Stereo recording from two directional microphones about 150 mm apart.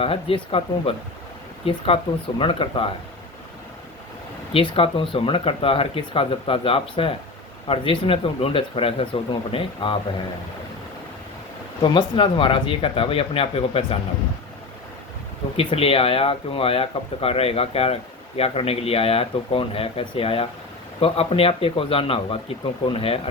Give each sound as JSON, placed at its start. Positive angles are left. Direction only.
{"t": 0.0, "sound": "speech", "side_deg": 40}
{"t": 4.5, "sound": "speech", "side_deg": 35}
{"t": 11.8, "sound": "speech", "side_deg": 35}
{"t": 15.5, "sound": "speech", "side_deg": 40}